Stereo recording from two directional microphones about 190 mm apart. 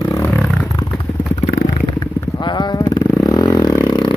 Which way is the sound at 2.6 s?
20° left (ahead or behind).